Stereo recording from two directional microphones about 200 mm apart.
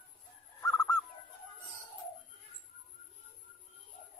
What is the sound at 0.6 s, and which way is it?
Bird, 15° left (ahead or behind).